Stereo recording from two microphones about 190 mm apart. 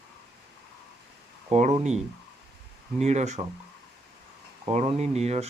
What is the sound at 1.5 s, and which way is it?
Speech, 35° right (ahead or behind).